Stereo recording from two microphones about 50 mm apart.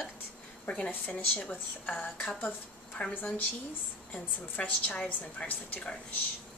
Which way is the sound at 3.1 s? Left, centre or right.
Left.